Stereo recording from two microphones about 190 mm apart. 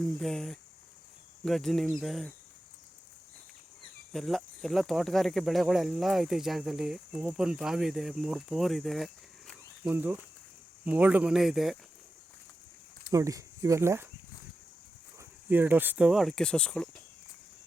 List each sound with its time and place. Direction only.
0.0 s speech: 5° left (ahead or behind)
4.1 s speech: centre (ahead or behind)
13.1 s speech: 15° right (ahead or behind)
15.2 s speech: 10° right (ahead or behind)